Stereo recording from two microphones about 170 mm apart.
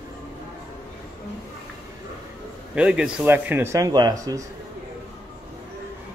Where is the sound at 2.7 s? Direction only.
5° right (ahead or behind).